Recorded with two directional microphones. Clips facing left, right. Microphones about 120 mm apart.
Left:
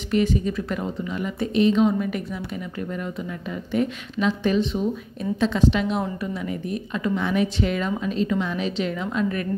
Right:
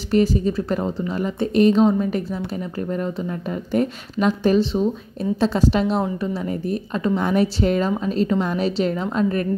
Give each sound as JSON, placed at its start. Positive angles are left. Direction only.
{"t": 0.1, "sound": "a woman's voice", "side_deg": -35}
{"t": 3.7, "sound": "a woman's voice", "side_deg": -45}